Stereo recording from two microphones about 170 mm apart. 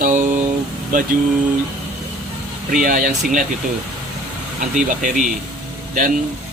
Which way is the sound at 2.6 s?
55° right (ahead or behind).